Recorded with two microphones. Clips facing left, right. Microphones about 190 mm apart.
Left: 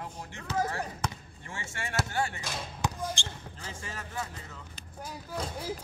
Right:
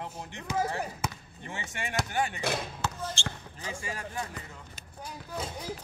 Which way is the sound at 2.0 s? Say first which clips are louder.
Right 1 dB; 15° right (ahead or behind).